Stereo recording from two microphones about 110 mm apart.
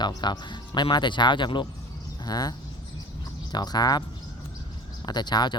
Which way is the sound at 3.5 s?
40° left (ahead or behind).